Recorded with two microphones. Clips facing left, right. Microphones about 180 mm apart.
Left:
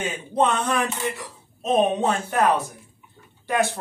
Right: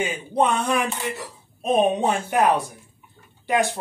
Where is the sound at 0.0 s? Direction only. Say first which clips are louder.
Right 1 dB; 10° right (ahead or behind).